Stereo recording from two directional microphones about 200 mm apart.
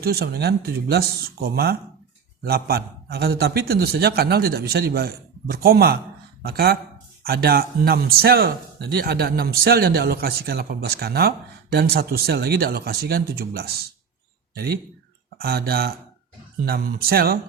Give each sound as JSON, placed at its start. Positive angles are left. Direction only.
{"t": 0.0, "sound": "speech", "side_deg": -50}
{"t": 15.4, "sound": "speech", "side_deg": -50}